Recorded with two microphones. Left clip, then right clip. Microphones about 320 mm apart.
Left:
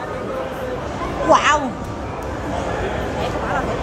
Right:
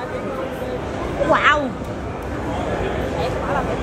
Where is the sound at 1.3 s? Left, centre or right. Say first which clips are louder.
Left 2 dB; centre.